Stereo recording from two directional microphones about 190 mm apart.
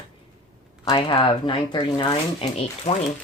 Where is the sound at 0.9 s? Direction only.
25° left (ahead or behind).